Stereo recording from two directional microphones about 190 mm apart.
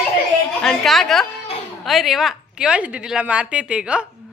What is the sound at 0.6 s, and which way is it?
A woman's voice, centre (ahead or behind).